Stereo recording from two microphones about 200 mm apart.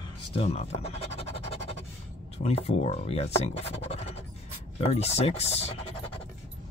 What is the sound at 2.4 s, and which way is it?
Speech, 30° left (ahead or behind).